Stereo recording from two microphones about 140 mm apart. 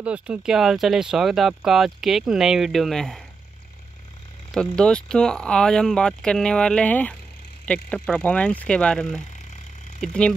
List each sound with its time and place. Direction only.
0.0 s speech: 10° right (ahead or behind)
4.5 s speech: 5° left (ahead or behind)